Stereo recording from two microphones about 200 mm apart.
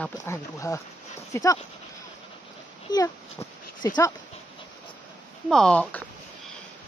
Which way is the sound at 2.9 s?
20° left (ahead or behind).